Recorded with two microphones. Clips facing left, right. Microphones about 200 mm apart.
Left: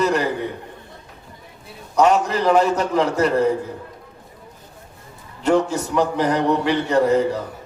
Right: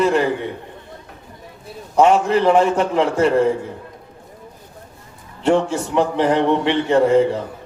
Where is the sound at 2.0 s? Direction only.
40° left (ahead or behind).